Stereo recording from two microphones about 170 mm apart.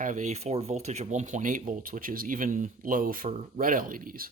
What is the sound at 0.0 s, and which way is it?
Speech, 45° right (ahead or behind).